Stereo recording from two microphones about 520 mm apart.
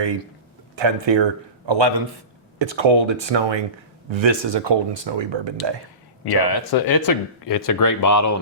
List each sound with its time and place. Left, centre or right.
0.8 s speech: right
6.3 s speech: left